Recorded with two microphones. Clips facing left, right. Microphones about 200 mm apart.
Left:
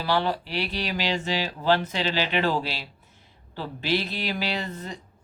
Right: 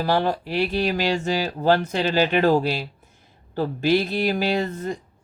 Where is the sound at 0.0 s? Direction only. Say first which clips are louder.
Right 4 dB; 45° right (ahead or behind).